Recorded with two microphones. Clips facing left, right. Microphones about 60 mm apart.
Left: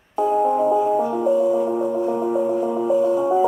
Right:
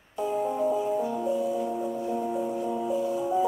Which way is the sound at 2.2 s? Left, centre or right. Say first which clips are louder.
Left 9 dB; left.